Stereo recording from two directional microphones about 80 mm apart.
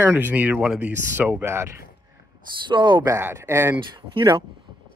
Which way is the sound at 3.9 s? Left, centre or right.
Right.